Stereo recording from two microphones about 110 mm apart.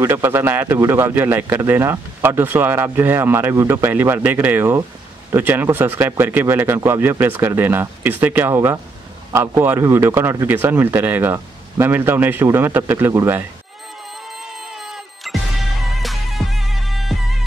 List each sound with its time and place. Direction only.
0.0 s speech: 25° right (ahead or behind)
14.8 s music: centre (ahead or behind)